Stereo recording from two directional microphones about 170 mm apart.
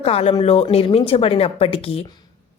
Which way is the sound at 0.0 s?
35° left (ahead or behind).